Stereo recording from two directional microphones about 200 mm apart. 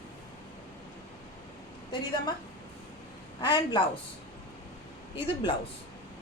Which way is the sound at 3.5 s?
20° left (ahead or behind).